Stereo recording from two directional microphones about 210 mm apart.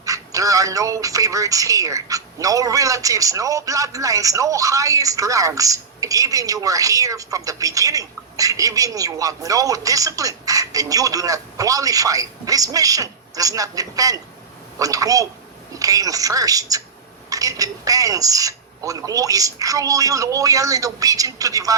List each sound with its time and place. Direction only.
0.0 s speech: 15° right (ahead or behind)